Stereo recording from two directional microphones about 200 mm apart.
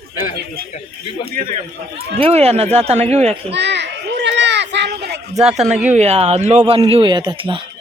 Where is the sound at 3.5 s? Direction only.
60° right (ahead or behind).